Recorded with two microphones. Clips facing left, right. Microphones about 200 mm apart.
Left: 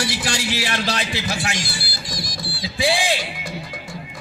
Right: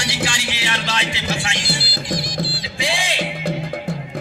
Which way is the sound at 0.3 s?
40° left (ahead or behind).